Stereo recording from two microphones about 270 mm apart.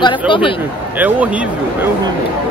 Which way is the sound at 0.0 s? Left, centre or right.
Centre.